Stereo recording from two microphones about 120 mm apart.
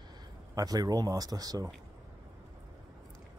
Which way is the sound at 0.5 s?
30° right (ahead or behind).